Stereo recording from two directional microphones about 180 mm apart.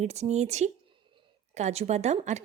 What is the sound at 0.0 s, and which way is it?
A woman's voice, 40° right (ahead or behind).